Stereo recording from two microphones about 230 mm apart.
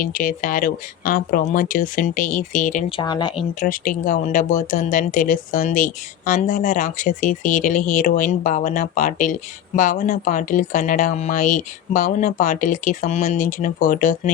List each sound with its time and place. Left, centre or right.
0.0 s speech: left
3.0 s speech: centre
3.6 s speech: left